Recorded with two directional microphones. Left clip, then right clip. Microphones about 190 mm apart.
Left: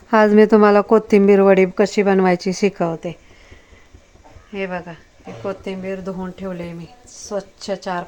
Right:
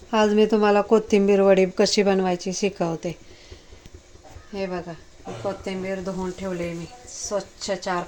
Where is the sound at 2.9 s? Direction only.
Centre (ahead or behind).